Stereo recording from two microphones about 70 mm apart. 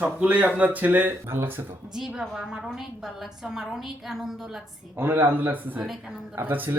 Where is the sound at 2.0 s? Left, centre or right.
Centre.